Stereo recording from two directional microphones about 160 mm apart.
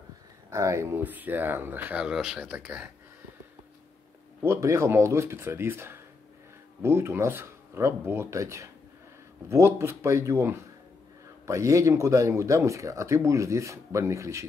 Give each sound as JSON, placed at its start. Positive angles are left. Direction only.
{"t": 0.5, "sound": "speech", "side_deg": -20}
{"t": 4.4, "sound": "speech", "side_deg": -15}